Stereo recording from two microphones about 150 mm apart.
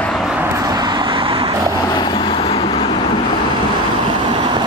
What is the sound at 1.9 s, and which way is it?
Vehicle, 30° left (ahead or behind).